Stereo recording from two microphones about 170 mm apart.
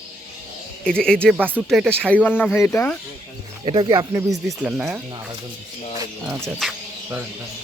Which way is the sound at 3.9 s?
15° right (ahead or behind).